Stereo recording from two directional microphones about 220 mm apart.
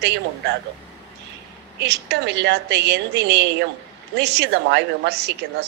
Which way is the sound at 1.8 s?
50° right (ahead or behind).